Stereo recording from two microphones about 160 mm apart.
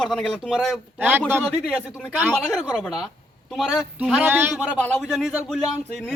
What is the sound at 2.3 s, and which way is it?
A man's voice, centre (ahead or behind).